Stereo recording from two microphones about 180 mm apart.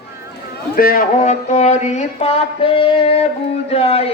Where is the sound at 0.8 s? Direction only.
50° left (ahead or behind).